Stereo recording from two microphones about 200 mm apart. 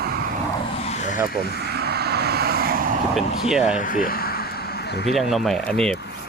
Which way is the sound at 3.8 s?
45° left (ahead or behind).